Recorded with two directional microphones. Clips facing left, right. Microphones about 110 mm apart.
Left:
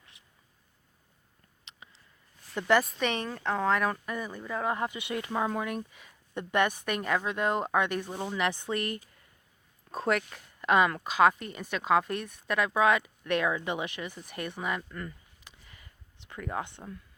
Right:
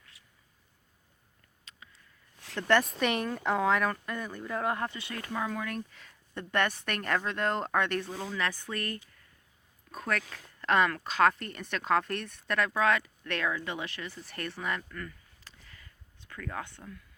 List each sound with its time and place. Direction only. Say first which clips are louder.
1.8 s a sound: left 2 dB; 25° left (ahead or behind)
2.6 s speech: left 1 dB; 5° left (ahead or behind)
3.0 s speech: right 1 dB; 5° right (ahead or behind)
4.9 s speech: left 4 dB; 20° left (ahead or behind)
5.7 s a woman's voice: left 2 dB; 15° left (ahead or behind)
10.1 s speech: left 4 dB; 15° left (ahead or behind)